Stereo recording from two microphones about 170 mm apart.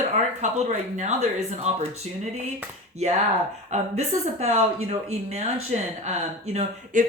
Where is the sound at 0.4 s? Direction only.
45° right (ahead or behind).